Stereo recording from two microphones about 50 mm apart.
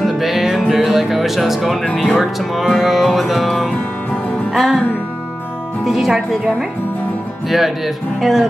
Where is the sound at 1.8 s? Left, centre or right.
Centre.